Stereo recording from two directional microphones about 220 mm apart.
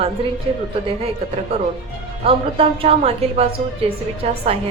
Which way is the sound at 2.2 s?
25° right (ahead or behind).